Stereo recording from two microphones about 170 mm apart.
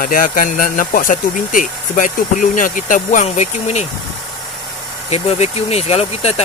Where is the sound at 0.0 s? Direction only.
55° left (ahead or behind).